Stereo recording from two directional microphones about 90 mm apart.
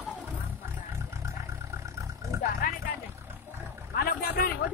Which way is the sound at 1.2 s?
35° right (ahead or behind).